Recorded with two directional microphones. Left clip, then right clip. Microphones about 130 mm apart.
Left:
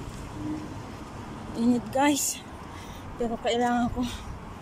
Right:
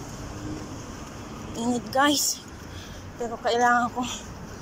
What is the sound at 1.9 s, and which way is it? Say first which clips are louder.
Speech: right 5 dB; 25° left (ahead or behind).